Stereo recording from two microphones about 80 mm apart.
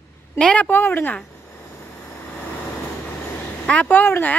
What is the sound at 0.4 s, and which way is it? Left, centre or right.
Speech, centre.